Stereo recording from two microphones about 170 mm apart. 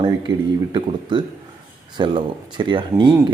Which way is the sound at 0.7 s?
30° right (ahead or behind).